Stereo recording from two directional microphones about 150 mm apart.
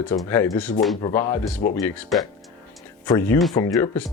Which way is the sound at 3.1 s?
15° left (ahead or behind).